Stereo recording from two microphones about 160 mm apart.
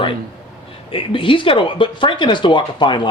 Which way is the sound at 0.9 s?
35° left (ahead or behind).